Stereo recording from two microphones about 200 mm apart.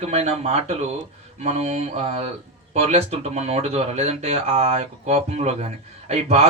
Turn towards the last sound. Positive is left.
turn(degrees=-35)  # may be behind; listen again after turning